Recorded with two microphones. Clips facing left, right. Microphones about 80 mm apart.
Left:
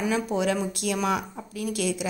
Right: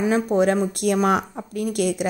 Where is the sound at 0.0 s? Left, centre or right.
Right.